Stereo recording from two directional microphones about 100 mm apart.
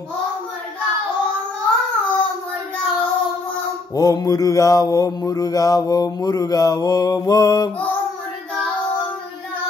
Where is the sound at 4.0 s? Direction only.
35° left (ahead or behind).